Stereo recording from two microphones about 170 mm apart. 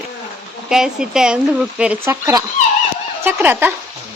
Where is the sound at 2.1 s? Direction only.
20° right (ahead or behind).